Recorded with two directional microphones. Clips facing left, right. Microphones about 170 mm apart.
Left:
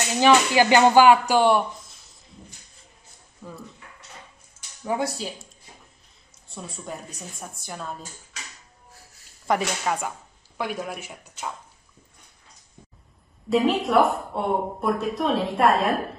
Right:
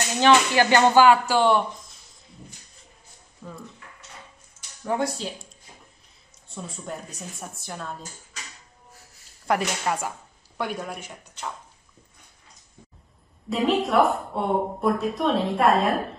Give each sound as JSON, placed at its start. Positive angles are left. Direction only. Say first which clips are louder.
{"t": 0.2, "sound": "speech", "louder": "left 1 dB", "side_deg": 10}
{"t": 3.4, "sound": "speech", "louder": "even", "side_deg": 10}
{"t": 4.8, "sound": "speech", "louder": "even", "side_deg": 5}
{"t": 7.2, "sound": "a woman's voice", "louder": "right 1 dB", "side_deg": 0}
{"t": 9.5, "sound": "a woman's voice", "louder": "even", "side_deg": 0}
{"t": 13.5, "sound": "a woman's voice", "louder": "left 2 dB", "side_deg": 0}